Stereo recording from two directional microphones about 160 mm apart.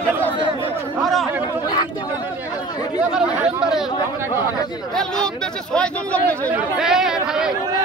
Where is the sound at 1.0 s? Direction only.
Centre (ahead or behind).